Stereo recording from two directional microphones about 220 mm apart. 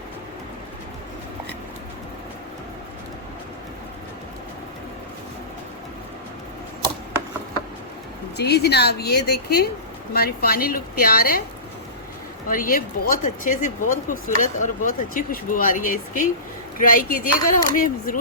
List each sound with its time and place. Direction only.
8.4 s a woman's voice: 50° left (ahead or behind)
12.5 s speech: 40° left (ahead or behind)